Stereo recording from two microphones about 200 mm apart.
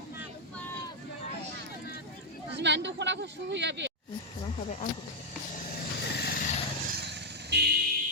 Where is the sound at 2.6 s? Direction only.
60° right (ahead or behind).